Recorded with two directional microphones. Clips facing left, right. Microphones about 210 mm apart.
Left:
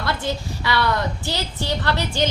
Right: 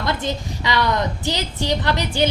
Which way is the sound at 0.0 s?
20° right (ahead or behind).